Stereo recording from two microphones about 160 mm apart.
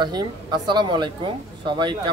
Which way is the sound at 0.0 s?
25° right (ahead or behind).